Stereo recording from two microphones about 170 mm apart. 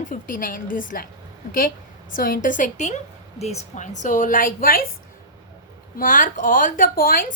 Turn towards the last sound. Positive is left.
turn(degrees=55)  # may be behind; listen again after turning